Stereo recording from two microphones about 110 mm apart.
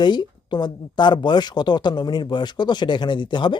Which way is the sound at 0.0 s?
40° left (ahead or behind).